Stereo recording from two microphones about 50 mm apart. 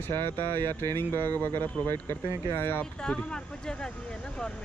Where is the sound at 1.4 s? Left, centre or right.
Left.